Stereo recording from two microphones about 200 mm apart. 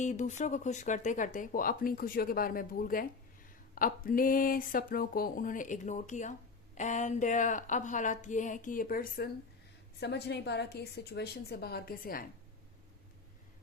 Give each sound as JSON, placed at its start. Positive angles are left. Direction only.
{"t": 0.0, "sound": "a woman's voice", "side_deg": 35}